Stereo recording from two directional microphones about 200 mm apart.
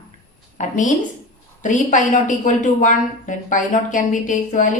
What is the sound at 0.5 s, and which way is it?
A woman's voice, 40° left (ahead or behind).